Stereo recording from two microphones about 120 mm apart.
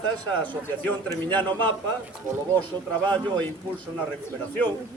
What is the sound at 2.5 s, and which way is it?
Speech, 10° left (ahead or behind).